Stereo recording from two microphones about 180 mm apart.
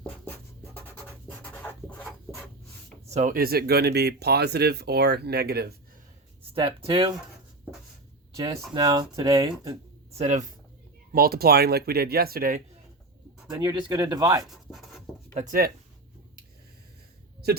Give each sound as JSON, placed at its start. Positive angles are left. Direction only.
{"t": 0.3, "sound": "scratch", "side_deg": 10}
{"t": 3.1, "sound": "speech", "side_deg": -45}
{"t": 6.5, "sound": "speech", "side_deg": -30}
{"t": 8.7, "sound": "speech", "side_deg": -25}
{"t": 10.1, "sound": "speech", "side_deg": -40}
{"t": 11.1, "sound": "speech", "side_deg": -55}
{"t": 13.5, "sound": "speech", "side_deg": -20}
{"t": 14.4, "sound": "a sound", "side_deg": 0}
{"t": 15.4, "sound": "speech", "side_deg": -50}